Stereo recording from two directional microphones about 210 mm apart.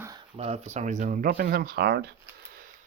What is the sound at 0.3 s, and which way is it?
Speech, 30° right (ahead or behind).